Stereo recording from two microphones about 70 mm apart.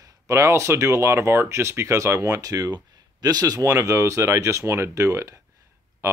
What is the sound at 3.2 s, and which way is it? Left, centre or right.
Speech, right.